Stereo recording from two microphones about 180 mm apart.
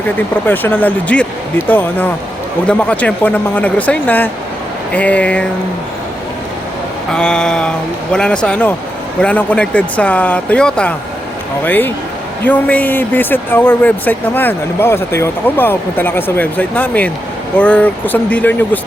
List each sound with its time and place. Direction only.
0.4 s speech: 10° left (ahead or behind)
7.1 s a sound: 5° left (ahead or behind)
9.2 s speech: 10° left (ahead or behind)